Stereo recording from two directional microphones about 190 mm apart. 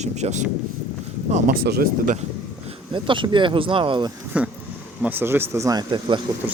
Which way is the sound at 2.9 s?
25° right (ahead or behind).